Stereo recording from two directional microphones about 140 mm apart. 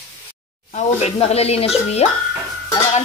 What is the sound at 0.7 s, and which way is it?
Speech, 50° left (ahead or behind).